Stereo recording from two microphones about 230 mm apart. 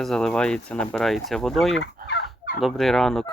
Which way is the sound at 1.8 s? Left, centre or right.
Left.